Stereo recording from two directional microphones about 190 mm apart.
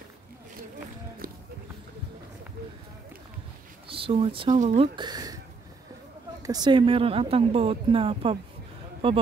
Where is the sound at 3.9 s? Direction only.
30° right (ahead or behind).